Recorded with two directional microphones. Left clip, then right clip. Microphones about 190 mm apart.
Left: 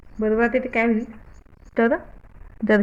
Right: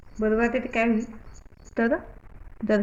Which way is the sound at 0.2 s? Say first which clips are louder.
Left 4 dB; 45° left (ahead or behind).